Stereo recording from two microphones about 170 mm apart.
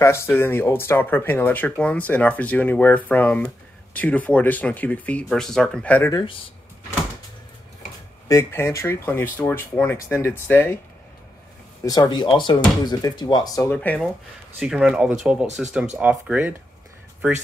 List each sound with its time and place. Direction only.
0.0 s speech: 15° left (ahead or behind)
8.3 s speech: 15° left (ahead or behind)
11.8 s speech: 25° left (ahead or behind)
13.7 s speech: 10° left (ahead or behind); by 16.5 s 10° right (ahead or behind)